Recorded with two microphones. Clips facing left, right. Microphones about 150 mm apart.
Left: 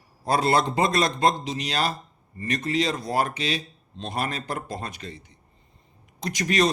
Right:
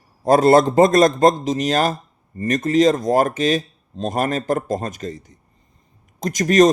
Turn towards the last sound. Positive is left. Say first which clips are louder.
# right 9 dB
turn(degrees=-45)  # may be behind; listen again after turning